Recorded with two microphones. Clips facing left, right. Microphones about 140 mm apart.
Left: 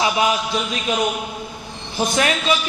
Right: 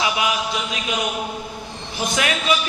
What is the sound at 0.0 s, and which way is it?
Speech, 35° left (ahead or behind).